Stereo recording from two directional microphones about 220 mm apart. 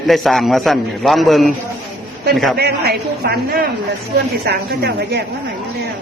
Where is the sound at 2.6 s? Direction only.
45° right (ahead or behind).